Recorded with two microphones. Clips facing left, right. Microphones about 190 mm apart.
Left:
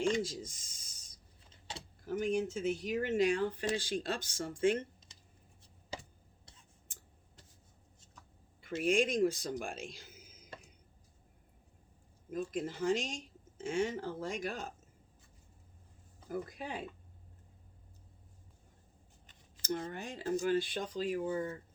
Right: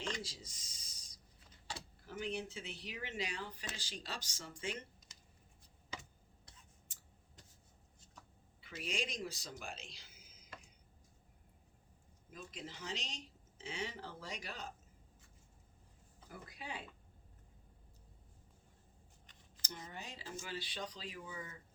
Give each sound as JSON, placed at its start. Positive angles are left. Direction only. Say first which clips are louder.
{"t": 0.2, "sound": "speech", "louder": "left 12 dB", "side_deg": 50}
{"t": 2.0, "sound": "speech", "louder": "left 9 dB", "side_deg": 45}
{"t": 5.9, "sound": "a sound", "louder": "left 5 dB", "side_deg": 35}
{"t": 8.6, "sound": "speech", "louder": "left 13 dB", "side_deg": 50}
{"t": 12.3, "sound": "speech", "louder": "left 13 dB", "side_deg": 50}
{"t": 16.3, "sound": "speech", "louder": "left 9 dB", "side_deg": 45}
{"t": 19.6, "sound": "speech", "louder": "left 12 dB", "side_deg": 55}